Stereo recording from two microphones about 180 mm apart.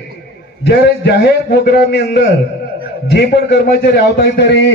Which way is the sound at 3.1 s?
65° left (ahead or behind).